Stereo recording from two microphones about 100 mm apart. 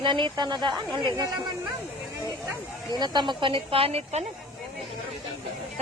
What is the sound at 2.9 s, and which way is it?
Speech, 50° right (ahead or behind).